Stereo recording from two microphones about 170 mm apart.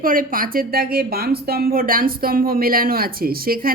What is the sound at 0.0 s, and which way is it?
Speech, 55° right (ahead or behind).